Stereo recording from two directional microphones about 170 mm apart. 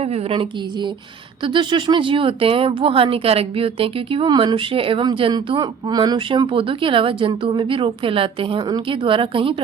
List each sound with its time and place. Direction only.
0.0 s speech: 35° right (ahead or behind)